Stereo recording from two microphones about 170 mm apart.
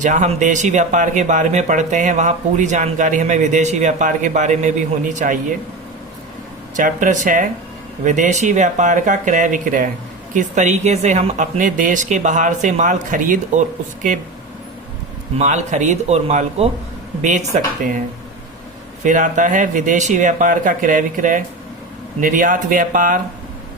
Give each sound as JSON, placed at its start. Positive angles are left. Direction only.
{"t": 0.0, "sound": "speech", "side_deg": -45}
{"t": 6.7, "sound": "speech", "side_deg": -50}
{"t": 15.4, "sound": "speech", "side_deg": -45}
{"t": 19.0, "sound": "speech", "side_deg": -50}